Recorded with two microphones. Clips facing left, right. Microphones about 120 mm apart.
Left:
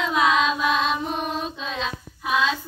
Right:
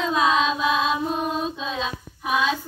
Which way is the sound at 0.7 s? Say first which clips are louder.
Even; 5° right (ahead or behind).